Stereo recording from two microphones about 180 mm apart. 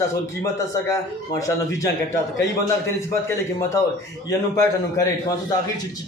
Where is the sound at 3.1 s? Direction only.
15° left (ahead or behind).